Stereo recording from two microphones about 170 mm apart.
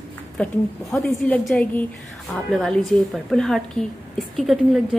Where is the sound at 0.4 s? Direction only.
10° left (ahead or behind).